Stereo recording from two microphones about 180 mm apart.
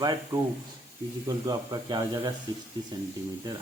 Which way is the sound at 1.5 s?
20° right (ahead or behind).